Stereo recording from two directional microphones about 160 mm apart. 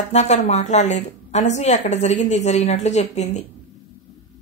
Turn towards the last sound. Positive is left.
turn(degrees=45)  # may be behind; listen again after turning